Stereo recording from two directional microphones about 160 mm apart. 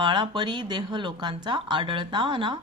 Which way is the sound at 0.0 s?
30° right (ahead or behind).